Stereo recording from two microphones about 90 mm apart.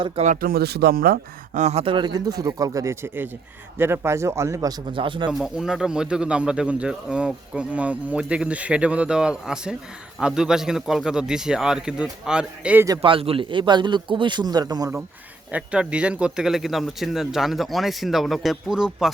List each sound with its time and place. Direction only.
0.2 s speech: 90° right
1.8 s speech: 65° right (ahead or behind); by 4.7 s 35° right (ahead or behind)
4.9 s speech: 65° right (ahead or behind)
5.3 s a man's voice: 5° right (ahead or behind)
13.0 s a man's voice: 90° right; by 14.8 s 45° right (ahead or behind)
15.5 s speech: 10° right (ahead or behind)